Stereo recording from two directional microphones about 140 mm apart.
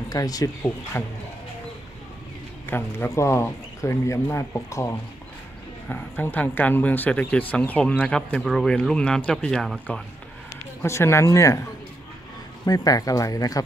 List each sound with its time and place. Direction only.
0.1 s a man's voice: 25° left (ahead or behind)
2.7 s a man's voice: 15° left (ahead or behind)
8.4 s speech: centre (ahead or behind)
10.8 s a man's voice: 20° left (ahead or behind)
12.6 s a man's voice: 25° left (ahead or behind)